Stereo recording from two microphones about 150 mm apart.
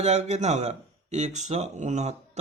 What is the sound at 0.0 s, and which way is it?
Speech, 50° right (ahead or behind).